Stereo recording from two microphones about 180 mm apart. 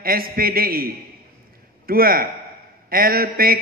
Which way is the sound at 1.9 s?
55° right (ahead or behind).